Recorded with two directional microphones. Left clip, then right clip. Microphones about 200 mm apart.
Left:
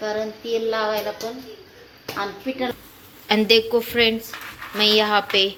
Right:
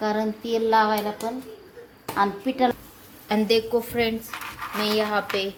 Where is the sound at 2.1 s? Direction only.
45° right (ahead or behind).